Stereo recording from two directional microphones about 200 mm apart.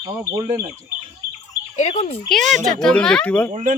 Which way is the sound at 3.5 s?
40° right (ahead or behind).